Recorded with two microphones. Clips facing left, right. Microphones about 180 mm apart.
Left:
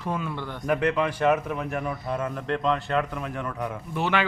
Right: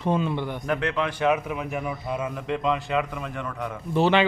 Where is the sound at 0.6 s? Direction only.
5° left (ahead or behind).